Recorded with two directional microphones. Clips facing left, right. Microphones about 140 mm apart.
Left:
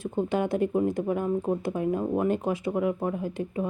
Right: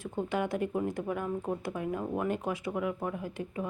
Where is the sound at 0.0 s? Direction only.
25° left (ahead or behind).